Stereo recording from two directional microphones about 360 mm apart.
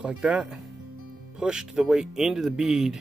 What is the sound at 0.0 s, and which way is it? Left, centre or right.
Speech, centre.